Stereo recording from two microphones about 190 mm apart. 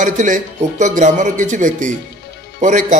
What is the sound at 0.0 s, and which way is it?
A man's voice, 40° right (ahead or behind).